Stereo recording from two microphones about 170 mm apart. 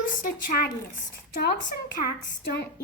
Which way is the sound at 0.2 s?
60° left (ahead or behind).